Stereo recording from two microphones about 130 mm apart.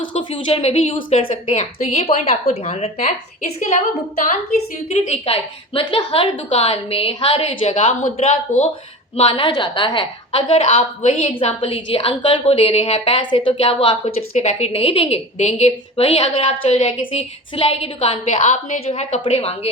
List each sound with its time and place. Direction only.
0.1 s a woman's voice: 45° left (ahead or behind); by 3.2 s 60° left (ahead or behind)
4.9 s a woman's voice: 55° left (ahead or behind)
17.0 s a woman's voice: 40° left (ahead or behind)